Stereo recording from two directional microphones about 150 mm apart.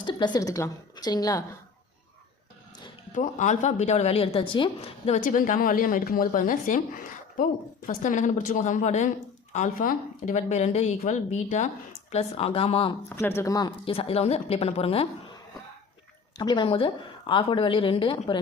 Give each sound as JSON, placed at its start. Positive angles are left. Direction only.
{"t": 0.0, "sound": "a woman's voice", "side_deg": 30}
{"t": 3.1, "sound": "a woman's voice", "side_deg": 55}
{"t": 5.2, "sound": "speech", "side_deg": 60}
{"t": 7.9, "sound": "speech", "side_deg": 55}
{"t": 13.1, "sound": "speech", "side_deg": 15}
{"t": 16.4, "sound": "speech", "side_deg": 30}